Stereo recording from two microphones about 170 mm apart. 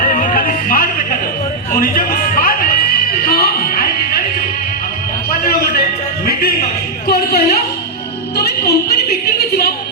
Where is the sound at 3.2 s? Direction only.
60° left (ahead or behind).